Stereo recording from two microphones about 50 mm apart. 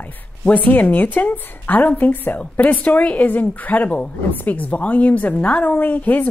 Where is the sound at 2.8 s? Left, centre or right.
Left.